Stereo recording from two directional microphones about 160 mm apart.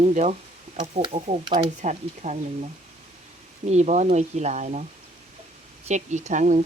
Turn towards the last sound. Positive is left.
turn(degrees=-50)  # may be behind; listen again after turning